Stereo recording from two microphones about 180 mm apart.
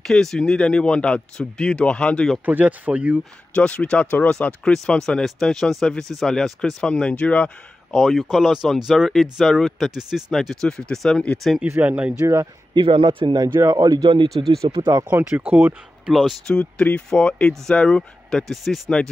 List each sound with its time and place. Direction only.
0.0 s speech: centre (ahead or behind)
2.4 s speech: 10° right (ahead or behind)
3.5 s speech: 5° left (ahead or behind)
11.6 s speech: 10° right (ahead or behind)
12.7 s speech: 25° right (ahead or behind)
14.9 s speech: 15° right (ahead or behind)
16.1 s speech: centre (ahead or behind)